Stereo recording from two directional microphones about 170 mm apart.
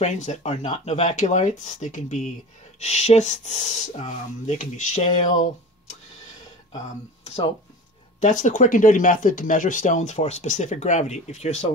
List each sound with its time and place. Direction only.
0.0 s speech: 40° left (ahead or behind)
7.2 s speech: 35° left (ahead or behind)
8.2 s speech: 45° left (ahead or behind)